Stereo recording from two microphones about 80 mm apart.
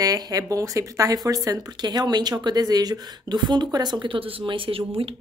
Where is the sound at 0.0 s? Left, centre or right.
Right.